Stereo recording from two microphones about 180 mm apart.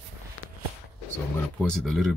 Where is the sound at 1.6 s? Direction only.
Centre (ahead or behind).